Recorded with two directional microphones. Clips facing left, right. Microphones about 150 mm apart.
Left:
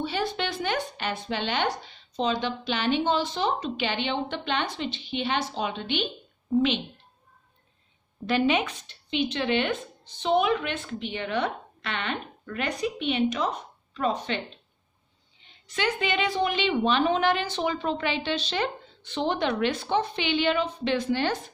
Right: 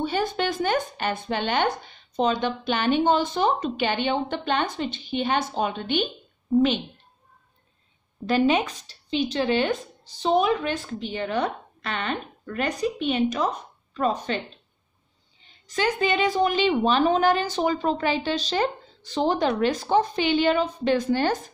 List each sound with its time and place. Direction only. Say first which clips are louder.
0.0 s speech: right 4 dB; 45° right (ahead or behind)
8.3 s a woman's voice: right 3 dB; 40° right (ahead or behind)
15.4 s a woman's voice: right 3 dB; 40° right (ahead or behind)